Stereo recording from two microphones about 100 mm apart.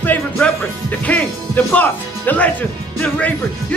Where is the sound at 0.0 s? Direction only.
15° left (ahead or behind).